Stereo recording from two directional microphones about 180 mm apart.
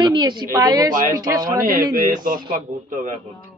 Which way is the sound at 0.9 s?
50° right (ahead or behind).